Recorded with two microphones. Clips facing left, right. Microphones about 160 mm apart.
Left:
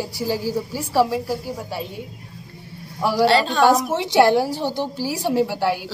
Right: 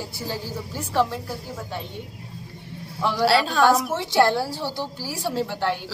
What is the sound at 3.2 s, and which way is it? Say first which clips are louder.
Speech: left 1 dB; 5° right (ahead or behind).